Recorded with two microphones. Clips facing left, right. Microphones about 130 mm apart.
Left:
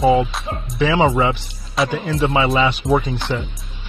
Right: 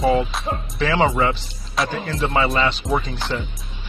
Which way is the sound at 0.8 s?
10° left (ahead or behind).